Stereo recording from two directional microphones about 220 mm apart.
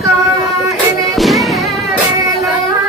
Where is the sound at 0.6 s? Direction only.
Centre (ahead or behind).